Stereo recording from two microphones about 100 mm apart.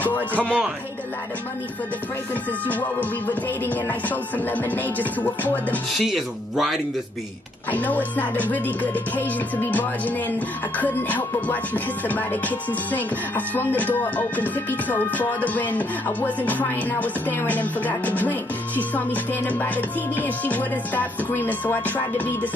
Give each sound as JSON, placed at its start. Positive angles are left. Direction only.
{"t": 0.3, "sound": "music", "side_deg": 15}
{"t": 2.6, "sound": "music", "side_deg": 15}
{"t": 5.9, "sound": "speech", "side_deg": 0}
{"t": 7.7, "sound": "music", "side_deg": 15}